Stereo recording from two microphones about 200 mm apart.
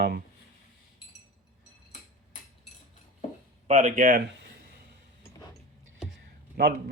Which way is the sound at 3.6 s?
35° right (ahead or behind).